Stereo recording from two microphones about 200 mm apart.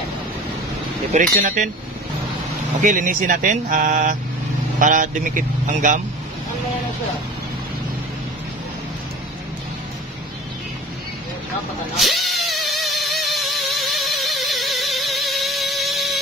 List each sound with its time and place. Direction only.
1.1 s speech: 40° right (ahead or behind)
2.8 s speech: 40° right (ahead or behind)
12.0 s a sound: centre (ahead or behind)